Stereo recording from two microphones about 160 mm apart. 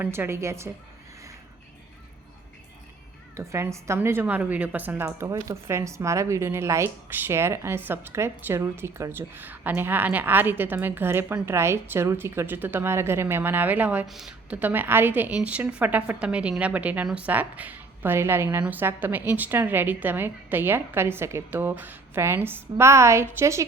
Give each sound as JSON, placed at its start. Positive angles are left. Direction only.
{"t": 0.0, "sound": "a woman's voice", "side_deg": -15}
{"t": 3.3, "sound": "a woman's voice", "side_deg": -20}